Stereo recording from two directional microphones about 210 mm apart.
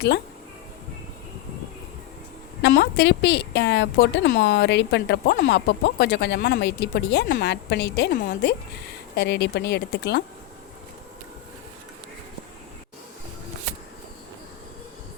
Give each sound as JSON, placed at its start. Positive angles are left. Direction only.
{"t": 2.6, "sound": "a woman's voice", "side_deg": 55}